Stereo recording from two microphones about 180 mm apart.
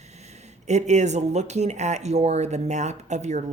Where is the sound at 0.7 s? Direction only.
40° right (ahead or behind).